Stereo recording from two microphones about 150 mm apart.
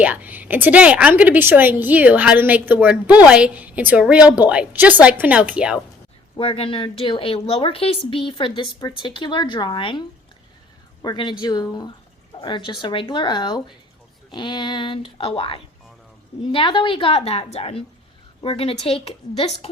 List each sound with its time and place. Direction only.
0.0 s a woman's voice: 10° right (ahead or behind)
6.4 s a woman's voice: 35° left (ahead or behind)
11.0 s a woman's voice: 30° left (ahead or behind)